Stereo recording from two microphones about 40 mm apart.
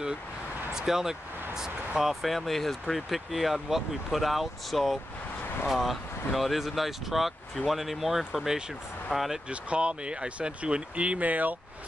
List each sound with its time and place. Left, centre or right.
0.7 s speech: centre
2.2 s speech: centre
9.5 s speech: right